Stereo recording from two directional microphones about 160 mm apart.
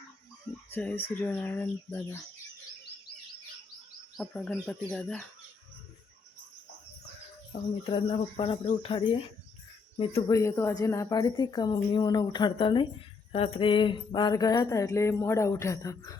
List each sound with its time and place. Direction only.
0.7 s speech: 10° left (ahead or behind)
4.2 s speech: 5° left (ahead or behind)
7.9 s speech: 35° left (ahead or behind)
10.2 s a sound: 20° left (ahead or behind)